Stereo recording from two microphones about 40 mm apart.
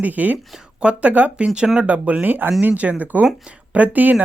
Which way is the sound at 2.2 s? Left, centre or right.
Right.